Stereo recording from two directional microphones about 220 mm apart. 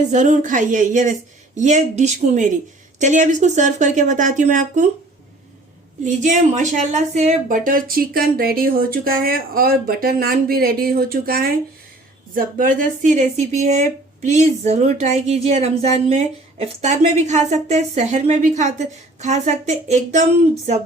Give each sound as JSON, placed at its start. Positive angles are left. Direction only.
{"t": 0.1, "sound": "speech", "side_deg": -35}
{"t": 6.1, "sound": "speech", "side_deg": -35}